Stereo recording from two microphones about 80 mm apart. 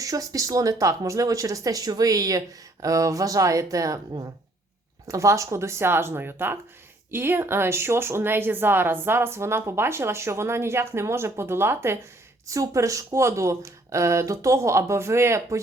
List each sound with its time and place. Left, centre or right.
0.0 s speech: right
5.0 s speech: right